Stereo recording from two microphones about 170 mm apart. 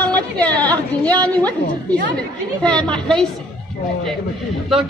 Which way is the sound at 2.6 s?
5° left (ahead or behind).